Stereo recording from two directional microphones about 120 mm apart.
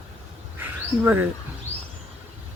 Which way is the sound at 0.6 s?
15° right (ahead or behind).